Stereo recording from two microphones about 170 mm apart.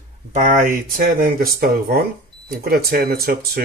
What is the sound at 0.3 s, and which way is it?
Speech, 50° right (ahead or behind).